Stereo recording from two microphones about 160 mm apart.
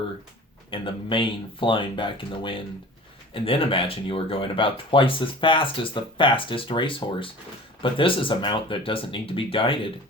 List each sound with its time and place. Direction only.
0.7 s speech: 35° left (ahead or behind)